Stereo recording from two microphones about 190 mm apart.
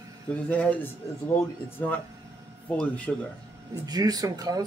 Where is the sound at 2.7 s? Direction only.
5° left (ahead or behind).